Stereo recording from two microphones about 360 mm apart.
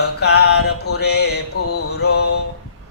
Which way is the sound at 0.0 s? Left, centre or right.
Left.